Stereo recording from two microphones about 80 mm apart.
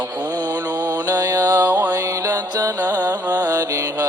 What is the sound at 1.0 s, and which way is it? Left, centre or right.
Mantra, right.